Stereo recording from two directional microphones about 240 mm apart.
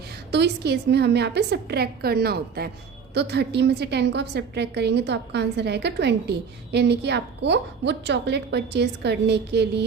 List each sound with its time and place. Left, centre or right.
0.3 s a woman's voice: right